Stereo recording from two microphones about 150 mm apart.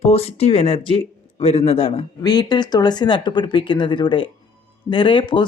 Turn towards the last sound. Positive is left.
turn(degrees=35)  # may be behind; listen again after turning